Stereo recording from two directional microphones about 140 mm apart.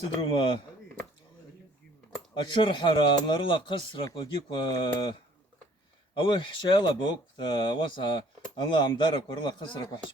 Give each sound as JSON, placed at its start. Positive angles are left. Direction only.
{"t": 0.0, "sound": "speech", "side_deg": 35}
{"t": 2.3, "sound": "speech", "side_deg": 35}
{"t": 6.1, "sound": "speech", "side_deg": 35}